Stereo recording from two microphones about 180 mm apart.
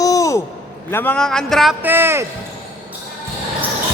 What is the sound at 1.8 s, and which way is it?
Speech, 10° right (ahead or behind).